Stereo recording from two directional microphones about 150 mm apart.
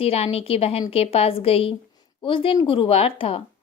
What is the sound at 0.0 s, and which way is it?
A woman's voice, 40° left (ahead or behind).